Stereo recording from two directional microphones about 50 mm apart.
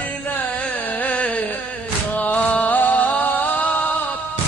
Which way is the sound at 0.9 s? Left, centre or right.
Left.